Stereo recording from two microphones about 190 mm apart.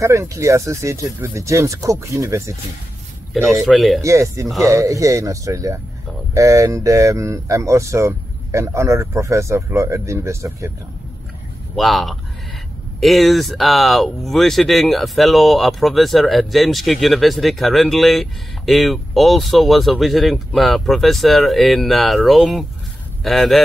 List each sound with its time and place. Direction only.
0.0 s speech: 15° right (ahead or behind)
3.6 s speech: centre (ahead or behind)
4.0 s speech: 15° right (ahead or behind)
11.7 s speech: centre (ahead or behind)